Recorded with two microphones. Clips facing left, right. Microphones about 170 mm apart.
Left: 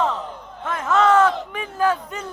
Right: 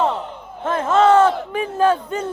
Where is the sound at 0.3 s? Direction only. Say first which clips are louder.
Right 2 dB; 10° right (ahead or behind).